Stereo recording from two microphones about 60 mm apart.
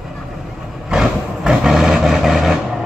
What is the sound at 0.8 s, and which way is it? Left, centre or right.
Vehicle, centre.